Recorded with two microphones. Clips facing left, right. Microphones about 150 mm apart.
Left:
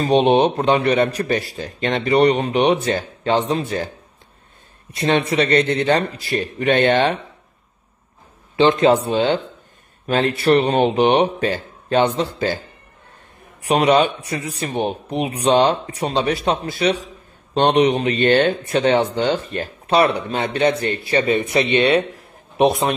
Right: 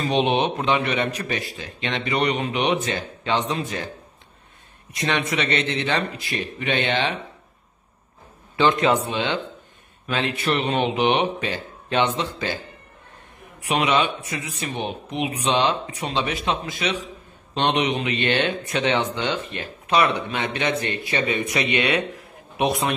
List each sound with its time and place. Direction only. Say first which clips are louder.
0.1 s speech: left 7 dB; 35° left (ahead or behind)
4.9 s speech: left 6 dB; 30° left (ahead or behind)
8.5 s speech: left 5 dB; 25° left (ahead or behind)
13.6 s a man's voice: left 6 dB; 35° left (ahead or behind)